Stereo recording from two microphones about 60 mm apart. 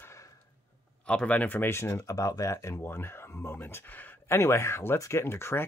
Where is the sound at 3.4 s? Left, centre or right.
Left.